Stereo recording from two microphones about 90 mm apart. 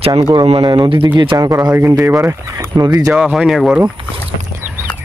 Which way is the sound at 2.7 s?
45° right (ahead or behind).